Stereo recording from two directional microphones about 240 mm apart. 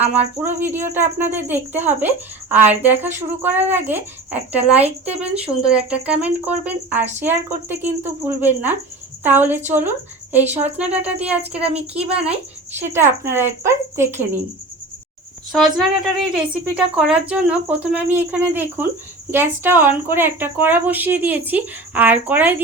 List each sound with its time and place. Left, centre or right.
0.1 s a woman's voice: centre
11.5 s speech: right
11.9 s a woman's voice: centre
15.5 s a woman's voice: centre